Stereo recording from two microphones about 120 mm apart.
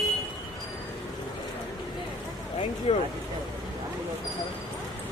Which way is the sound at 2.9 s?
55° left (ahead or behind).